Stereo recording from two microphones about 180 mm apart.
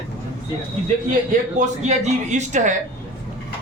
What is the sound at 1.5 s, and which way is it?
A man's voice, 40° right (ahead or behind).